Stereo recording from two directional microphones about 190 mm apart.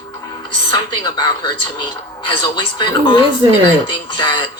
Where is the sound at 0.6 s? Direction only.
25° left (ahead or behind).